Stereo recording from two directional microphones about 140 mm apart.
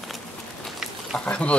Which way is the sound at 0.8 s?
5° left (ahead or behind).